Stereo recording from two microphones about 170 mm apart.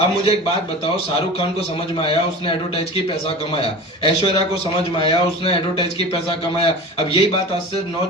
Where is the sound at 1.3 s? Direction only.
35° left (ahead or behind).